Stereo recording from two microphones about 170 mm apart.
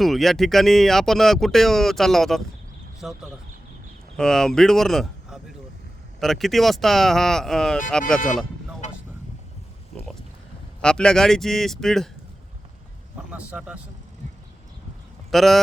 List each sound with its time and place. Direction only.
0.0 s speech: centre (ahead or behind)
4.2 s speech: 5° left (ahead or behind)
8.8 s vehicle: 45° left (ahead or behind)
10.8 s speech: 5° left (ahead or behind)
13.3 s speech: 5° right (ahead or behind)
15.3 s speech: centre (ahead or behind)